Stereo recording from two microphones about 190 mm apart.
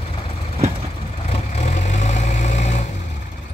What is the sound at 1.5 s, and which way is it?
Vehicle, 35° left (ahead or behind).